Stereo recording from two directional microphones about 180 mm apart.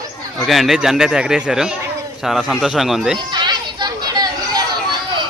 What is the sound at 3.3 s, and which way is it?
Children playing, 25° right (ahead or behind).